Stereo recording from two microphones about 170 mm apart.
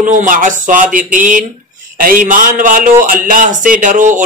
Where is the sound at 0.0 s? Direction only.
50° right (ahead or behind).